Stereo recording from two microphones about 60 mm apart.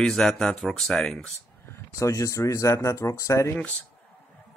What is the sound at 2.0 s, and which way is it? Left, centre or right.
Speech, left.